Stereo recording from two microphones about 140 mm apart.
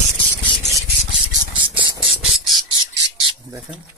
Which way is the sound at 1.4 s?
35° right (ahead or behind).